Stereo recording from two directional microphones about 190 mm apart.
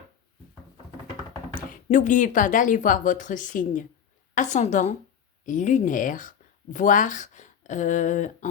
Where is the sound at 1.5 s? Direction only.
40° left (ahead or behind).